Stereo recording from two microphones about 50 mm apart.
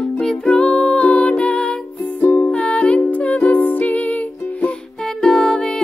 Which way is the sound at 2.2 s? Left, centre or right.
Left.